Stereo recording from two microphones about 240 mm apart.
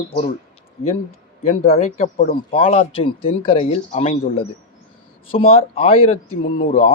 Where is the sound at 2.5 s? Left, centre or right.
Left.